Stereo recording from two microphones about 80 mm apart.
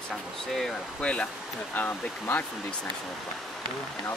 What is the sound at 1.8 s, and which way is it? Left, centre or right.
Speech, left.